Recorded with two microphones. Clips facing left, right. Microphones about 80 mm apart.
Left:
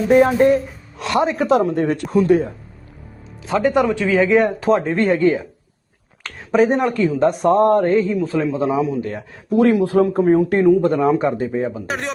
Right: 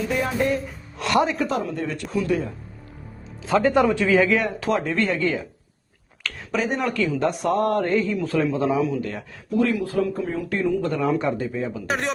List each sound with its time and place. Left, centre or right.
0.1 s speech: left
1.1 s mantra: left
1.4 s a woman's voice: left
3.4 s mantra: left
3.9 s a man's voice: centre
4.7 s speech: left
7.5 s mantra: left
8.1 s a man's voice: centre
9.5 s a woman's voice: left
9.8 s speech: left
11.9 s speech: centre